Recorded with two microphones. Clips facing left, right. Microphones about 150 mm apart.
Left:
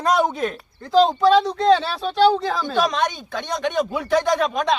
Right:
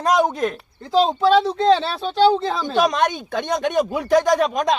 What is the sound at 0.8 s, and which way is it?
Speech, centre (ahead or behind).